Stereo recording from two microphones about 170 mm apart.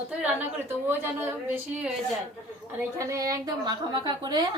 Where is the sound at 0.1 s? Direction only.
5° right (ahead or behind).